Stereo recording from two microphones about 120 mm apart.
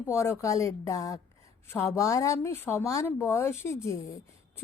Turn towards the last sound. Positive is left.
turn(degrees=25)  # may be behind; listen again after turning